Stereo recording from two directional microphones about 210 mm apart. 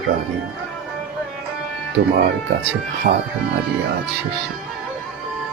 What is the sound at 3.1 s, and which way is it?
Speech, 40° right (ahead or behind).